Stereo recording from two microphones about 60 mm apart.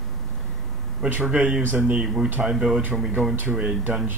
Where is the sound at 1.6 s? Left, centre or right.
Right.